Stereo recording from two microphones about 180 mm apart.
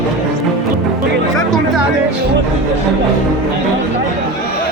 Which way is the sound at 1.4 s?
Centre (ahead or behind).